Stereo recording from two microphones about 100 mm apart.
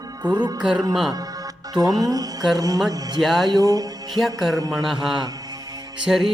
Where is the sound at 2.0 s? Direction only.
35° right (ahead or behind).